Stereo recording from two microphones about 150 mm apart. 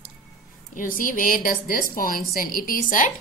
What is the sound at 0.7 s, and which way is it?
A woman's voice, 65° left (ahead or behind).